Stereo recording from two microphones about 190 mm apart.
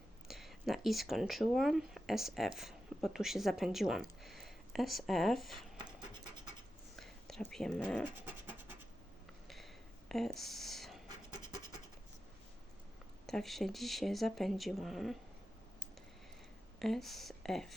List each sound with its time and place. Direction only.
0.3 s speech: centre (ahead or behind)
6.9 s whispering: centre (ahead or behind)
8.3 s scratch: 10° right (ahead or behind)
10.1 s a sound: centre (ahead or behind)
13.2 s speech: centre (ahead or behind)
16.8 s speech: centre (ahead or behind)